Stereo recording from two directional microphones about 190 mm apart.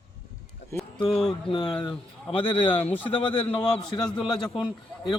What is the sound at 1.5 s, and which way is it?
Speech, 25° left (ahead or behind).